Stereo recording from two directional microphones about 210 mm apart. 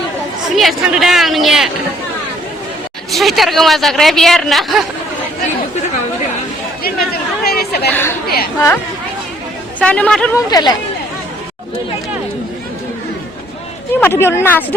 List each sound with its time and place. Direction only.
0.5 s speech: centre (ahead or behind)
3.1 s speech: centre (ahead or behind)
6.8 s chatter: 45° left (ahead or behind)
7.9 s speech: 10° left (ahead or behind)
9.8 s speech: 5° left (ahead or behind)
10.3 s speech: 20° left (ahead or behind)
14.0 s a woman's voice: 10° left (ahead or behind)